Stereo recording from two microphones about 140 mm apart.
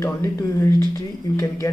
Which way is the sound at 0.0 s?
20° left (ahead or behind).